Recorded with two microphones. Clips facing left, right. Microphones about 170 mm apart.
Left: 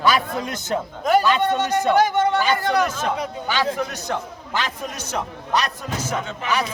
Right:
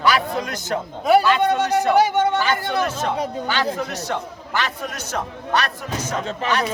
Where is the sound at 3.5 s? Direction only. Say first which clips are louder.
Left 3 dB; 10° left (ahead or behind).